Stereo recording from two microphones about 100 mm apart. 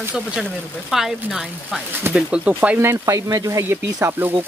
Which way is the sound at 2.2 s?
10° right (ahead or behind).